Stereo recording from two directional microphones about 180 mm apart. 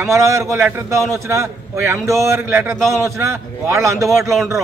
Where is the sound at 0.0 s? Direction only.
15° right (ahead or behind).